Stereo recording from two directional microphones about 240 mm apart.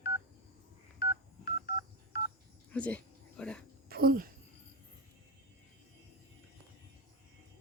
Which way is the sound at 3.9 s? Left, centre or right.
Right.